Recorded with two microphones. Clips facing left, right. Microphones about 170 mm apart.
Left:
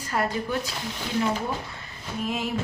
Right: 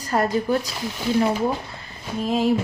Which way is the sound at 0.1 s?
40° right (ahead or behind).